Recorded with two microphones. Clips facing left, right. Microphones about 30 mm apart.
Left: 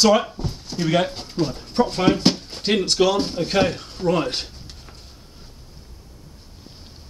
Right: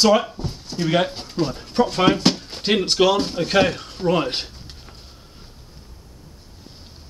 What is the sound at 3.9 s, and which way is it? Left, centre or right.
Speech, right.